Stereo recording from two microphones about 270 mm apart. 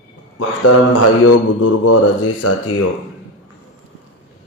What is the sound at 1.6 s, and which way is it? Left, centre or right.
Speech, left.